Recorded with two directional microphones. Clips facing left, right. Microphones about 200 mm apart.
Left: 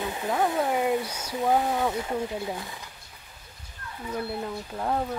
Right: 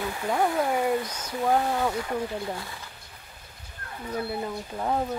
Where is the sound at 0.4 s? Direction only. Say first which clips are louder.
Right 1 dB; 20° left (ahead or behind).